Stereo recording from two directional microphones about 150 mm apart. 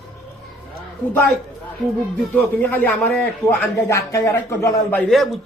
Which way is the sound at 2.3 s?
15° left (ahead or behind).